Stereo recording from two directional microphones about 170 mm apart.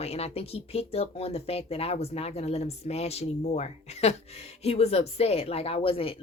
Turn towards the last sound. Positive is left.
turn(degrees=35)  # may be behind; listen again after turning